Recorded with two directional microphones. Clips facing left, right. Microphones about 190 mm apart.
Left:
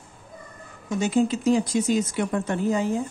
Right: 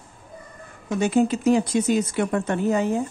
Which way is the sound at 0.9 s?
60° right (ahead or behind).